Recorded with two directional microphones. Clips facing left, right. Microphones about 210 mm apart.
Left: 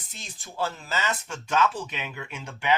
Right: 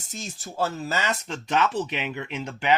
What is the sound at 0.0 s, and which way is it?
Speech, 45° right (ahead or behind).